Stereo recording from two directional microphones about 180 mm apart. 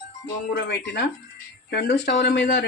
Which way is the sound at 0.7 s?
65° left (ahead or behind).